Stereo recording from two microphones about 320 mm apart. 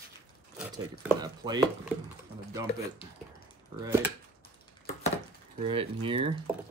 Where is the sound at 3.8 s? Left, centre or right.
Centre.